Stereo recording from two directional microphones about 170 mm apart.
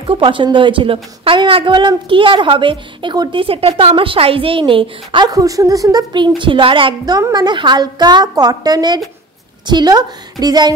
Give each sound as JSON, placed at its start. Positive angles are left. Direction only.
{"t": 0.0, "sound": "a woman's voice", "side_deg": -30}